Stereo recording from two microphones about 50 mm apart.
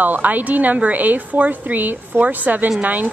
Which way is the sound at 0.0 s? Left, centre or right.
Right.